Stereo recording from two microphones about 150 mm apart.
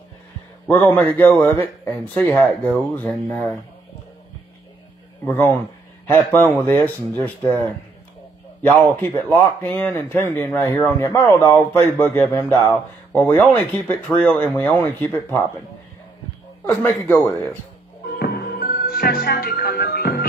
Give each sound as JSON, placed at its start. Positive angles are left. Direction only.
{"t": 0.7, "sound": "speech", "side_deg": 10}
{"t": 5.2, "sound": "speech", "side_deg": 15}
{"t": 16.6, "sound": "speech", "side_deg": 10}
{"t": 18.1, "sound": "music", "side_deg": 90}